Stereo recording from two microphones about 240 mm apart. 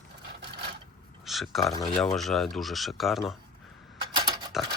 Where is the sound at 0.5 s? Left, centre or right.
Right.